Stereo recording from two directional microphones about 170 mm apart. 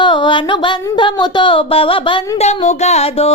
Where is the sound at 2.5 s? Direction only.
40° left (ahead or behind).